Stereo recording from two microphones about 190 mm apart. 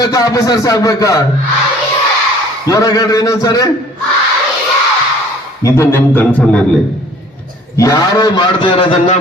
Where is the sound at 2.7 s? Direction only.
20° left (ahead or behind).